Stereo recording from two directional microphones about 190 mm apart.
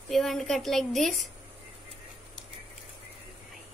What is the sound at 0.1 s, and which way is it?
Speech, centre (ahead or behind).